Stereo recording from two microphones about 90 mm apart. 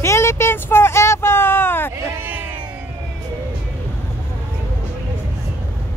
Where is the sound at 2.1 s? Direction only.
25° right (ahead or behind).